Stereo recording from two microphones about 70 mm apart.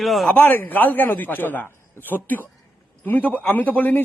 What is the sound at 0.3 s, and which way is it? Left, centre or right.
A man's voice, left.